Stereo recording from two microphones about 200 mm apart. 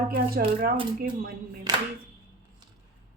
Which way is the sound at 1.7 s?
15° right (ahead or behind).